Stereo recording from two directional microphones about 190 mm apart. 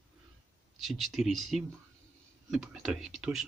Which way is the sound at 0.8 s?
Centre (ahead or behind).